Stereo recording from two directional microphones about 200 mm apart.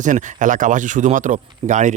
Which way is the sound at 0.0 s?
40° right (ahead or behind).